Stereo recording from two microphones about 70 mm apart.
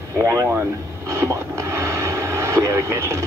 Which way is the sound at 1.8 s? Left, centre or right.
Right.